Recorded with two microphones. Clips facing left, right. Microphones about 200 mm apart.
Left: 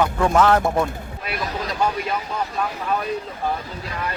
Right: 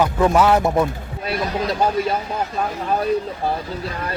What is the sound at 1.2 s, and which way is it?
Speech, 35° right (ahead or behind).